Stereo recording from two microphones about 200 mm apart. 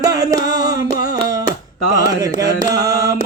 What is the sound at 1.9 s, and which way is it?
Carnatic music, 15° right (ahead or behind).